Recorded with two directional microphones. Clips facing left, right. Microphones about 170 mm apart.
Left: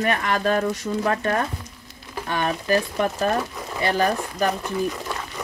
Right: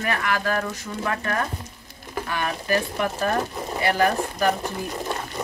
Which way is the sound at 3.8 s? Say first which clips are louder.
Even; 25° left (ahead or behind).